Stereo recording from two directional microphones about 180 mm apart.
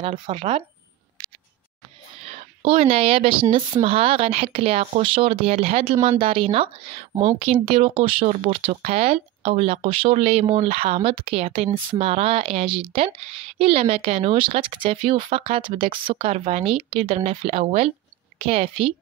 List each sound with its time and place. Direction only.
0.3 s speech: 30° right (ahead or behind)
2.2 s speech: 35° right (ahead or behind)